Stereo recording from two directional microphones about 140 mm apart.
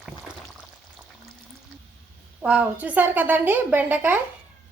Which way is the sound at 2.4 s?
10° right (ahead or behind).